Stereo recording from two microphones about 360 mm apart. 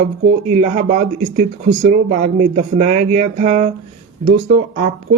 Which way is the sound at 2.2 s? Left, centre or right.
Right.